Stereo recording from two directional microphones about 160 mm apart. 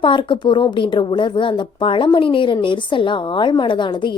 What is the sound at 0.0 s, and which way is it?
A woman's voice, 30° left (ahead or behind).